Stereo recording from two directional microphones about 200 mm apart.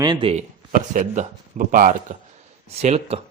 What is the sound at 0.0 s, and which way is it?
Speech, 25° right (ahead or behind).